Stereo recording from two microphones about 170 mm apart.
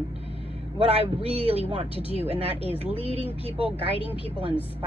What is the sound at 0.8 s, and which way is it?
Speech, 35° right (ahead or behind).